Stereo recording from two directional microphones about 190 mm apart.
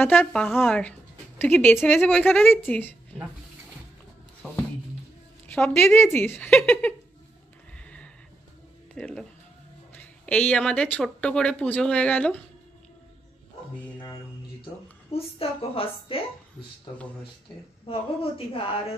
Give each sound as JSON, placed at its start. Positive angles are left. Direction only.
{"t": 0.0, "sound": "speech", "side_deg": 10}
{"t": 5.5, "sound": "speech", "side_deg": 5}
{"t": 8.9, "sound": "speech", "side_deg": 5}
{"t": 15.1, "sound": "a woman's voice", "side_deg": 30}
{"t": 17.8, "sound": "a woman's voice", "side_deg": 30}